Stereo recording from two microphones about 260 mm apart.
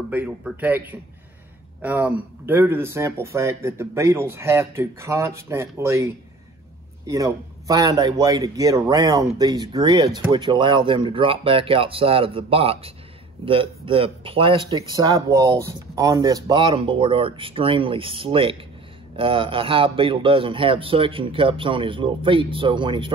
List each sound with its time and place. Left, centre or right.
0.1 s speech: centre